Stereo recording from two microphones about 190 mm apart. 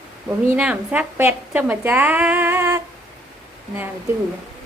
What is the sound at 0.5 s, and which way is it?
A woman's voice, 5° right (ahead or behind).